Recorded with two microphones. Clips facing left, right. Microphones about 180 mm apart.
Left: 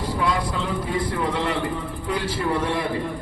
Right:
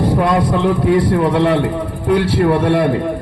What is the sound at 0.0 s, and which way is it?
A man's voice, 60° right (ahead or behind).